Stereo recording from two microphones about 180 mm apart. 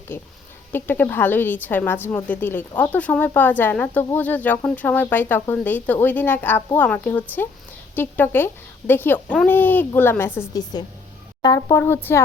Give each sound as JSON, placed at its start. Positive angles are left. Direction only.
{"t": 0.7, "sound": "a woman's voice", "side_deg": 10}